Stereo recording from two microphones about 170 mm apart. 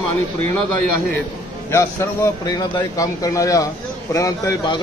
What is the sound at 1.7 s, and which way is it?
A man's voice, 15° left (ahead or behind).